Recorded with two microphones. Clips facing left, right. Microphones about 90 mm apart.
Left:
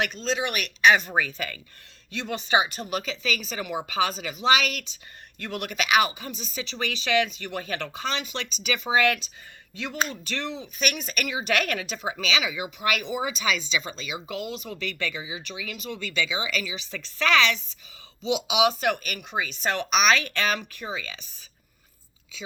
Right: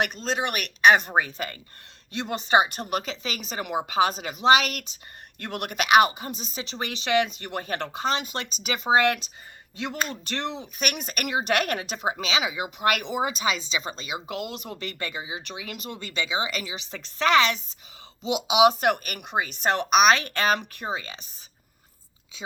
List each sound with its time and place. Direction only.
0.1 s speech: 45° right (ahead or behind)
10.2 s a woman's voice: 55° right (ahead or behind)
13.4 s a woman's voice: 35° right (ahead or behind)
14.4 s speech: 55° right (ahead or behind)
14.8 s a woman's voice: 45° right (ahead or behind)
15.4 s a woman's voice: 50° right (ahead or behind)
19.9 s speech: 45° right (ahead or behind)